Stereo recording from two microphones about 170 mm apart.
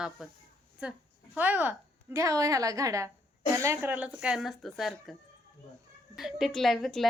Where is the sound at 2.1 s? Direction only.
20° right (ahead or behind); by 5.1 s centre (ahead or behind).